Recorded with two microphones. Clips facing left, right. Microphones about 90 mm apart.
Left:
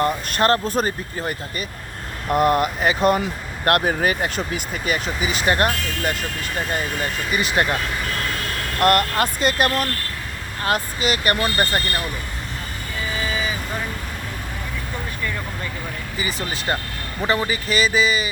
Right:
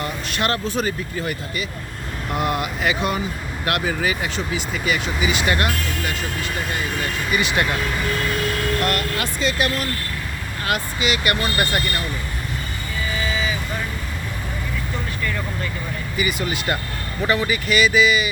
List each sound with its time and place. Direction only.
0.0 s speech: 45° left (ahead or behind)
7.3 s speech: 40° left (ahead or behind)
8.8 s speech: 50° left (ahead or behind)
16.1 s speech: 30° left (ahead or behind)